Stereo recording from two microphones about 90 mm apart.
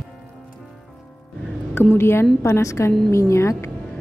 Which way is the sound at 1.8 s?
25° left (ahead or behind).